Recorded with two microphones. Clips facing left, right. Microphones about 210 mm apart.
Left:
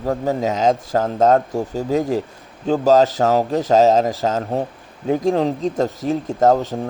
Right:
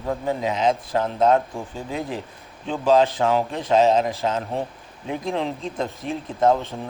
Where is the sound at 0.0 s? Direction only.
45° left (ahead or behind).